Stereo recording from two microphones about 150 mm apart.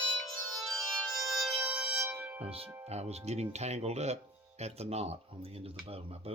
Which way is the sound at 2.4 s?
40° right (ahead or behind).